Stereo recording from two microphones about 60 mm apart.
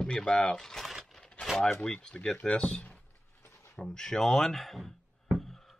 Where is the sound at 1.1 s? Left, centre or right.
Centre.